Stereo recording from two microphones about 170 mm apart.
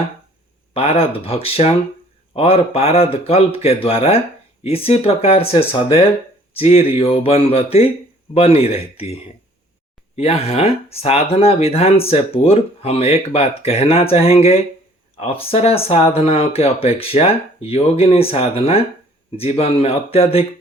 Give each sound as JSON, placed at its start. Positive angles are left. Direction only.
{"t": 0.7, "sound": "speech", "side_deg": 35}
{"t": 10.2, "sound": "speech", "side_deg": 35}